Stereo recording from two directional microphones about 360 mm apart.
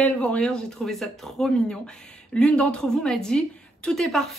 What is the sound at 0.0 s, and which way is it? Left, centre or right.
Speech, centre.